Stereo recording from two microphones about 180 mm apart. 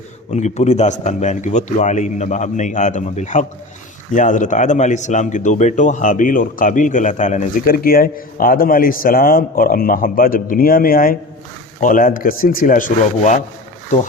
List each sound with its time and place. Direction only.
0.3 s a man's voice: 40° left (ahead or behind)